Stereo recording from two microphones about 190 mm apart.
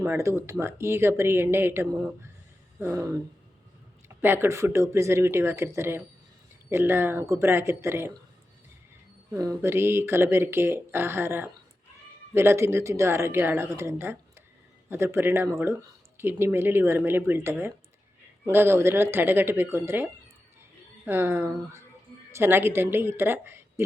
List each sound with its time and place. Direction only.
0.0 s speech: 15° right (ahead or behind)
9.3 s a woman's voice: 15° right (ahead or behind)